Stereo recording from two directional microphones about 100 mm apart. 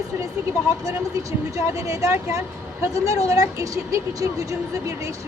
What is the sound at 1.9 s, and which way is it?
Speech, 30° right (ahead or behind).